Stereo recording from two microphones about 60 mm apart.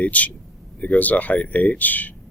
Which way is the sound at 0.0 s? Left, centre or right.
Left.